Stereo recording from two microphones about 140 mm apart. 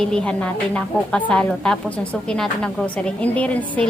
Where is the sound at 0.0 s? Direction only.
5° left (ahead or behind).